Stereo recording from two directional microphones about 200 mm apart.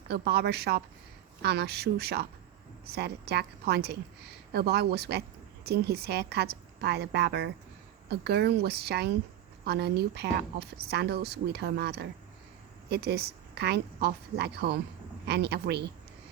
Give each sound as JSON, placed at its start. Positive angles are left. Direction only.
{"t": 0.1, "sound": "a woman's voice", "side_deg": -55}